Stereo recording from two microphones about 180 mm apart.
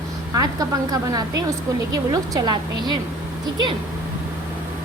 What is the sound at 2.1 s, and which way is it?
Speech, 20° right (ahead or behind).